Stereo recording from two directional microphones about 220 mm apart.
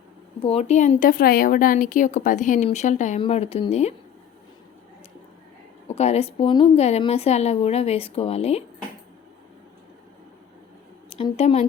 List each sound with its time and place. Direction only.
0.4 s speech: 30° left (ahead or behind)
5.9 s a woman's voice: 30° left (ahead or behind)
11.1 s a woman's voice: 25° left (ahead or behind)